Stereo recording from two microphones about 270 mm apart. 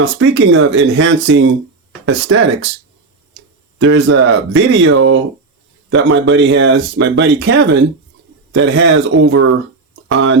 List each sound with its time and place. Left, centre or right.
0.2 s speech: right
3.8 s speech: right
9.9 s a sound: right